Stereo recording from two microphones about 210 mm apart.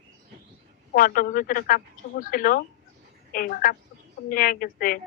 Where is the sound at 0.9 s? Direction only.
40° left (ahead or behind).